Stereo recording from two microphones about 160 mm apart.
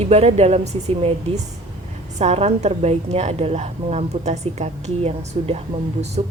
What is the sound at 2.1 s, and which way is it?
A woman's voice, 40° right (ahead or behind).